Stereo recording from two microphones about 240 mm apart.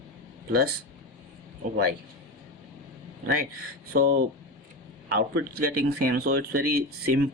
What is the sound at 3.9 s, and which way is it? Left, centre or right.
Speech, right.